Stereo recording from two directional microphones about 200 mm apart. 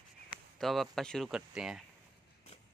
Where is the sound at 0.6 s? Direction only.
Centre (ahead or behind).